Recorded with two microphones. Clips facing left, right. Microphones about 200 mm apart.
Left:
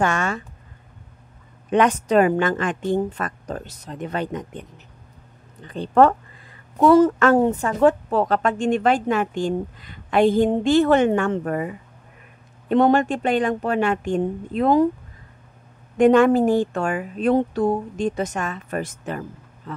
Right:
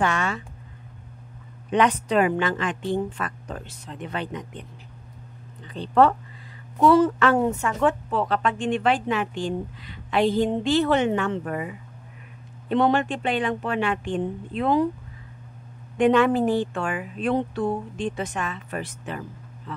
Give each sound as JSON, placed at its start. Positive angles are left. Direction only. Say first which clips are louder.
{"t": 0.0, "sound": "a woman's voice", "louder": "left 3 dB", "side_deg": 45}
{"t": 1.7, "sound": "a woman's voice", "louder": "left 3 dB", "side_deg": 45}
{"t": 16.0, "sound": "a woman's voice", "louder": "left 4 dB", "side_deg": 45}